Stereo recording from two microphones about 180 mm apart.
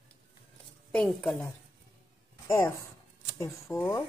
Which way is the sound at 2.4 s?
15° left (ahead or behind).